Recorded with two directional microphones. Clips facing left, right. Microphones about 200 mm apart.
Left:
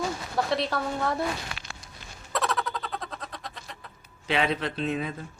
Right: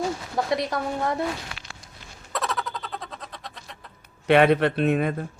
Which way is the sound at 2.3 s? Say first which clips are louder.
Left 1 dB; centre (ahead or behind).